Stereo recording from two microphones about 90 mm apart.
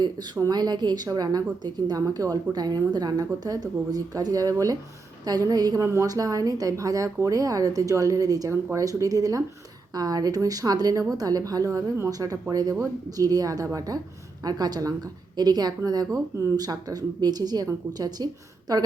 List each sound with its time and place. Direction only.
0.0 s a woman's voice: 45° right (ahead or behind)
5.8 s a woman's voice: 35° right (ahead or behind)